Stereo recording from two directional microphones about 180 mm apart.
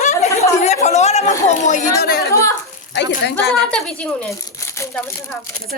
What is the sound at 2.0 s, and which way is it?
Speech, 60° left (ahead or behind).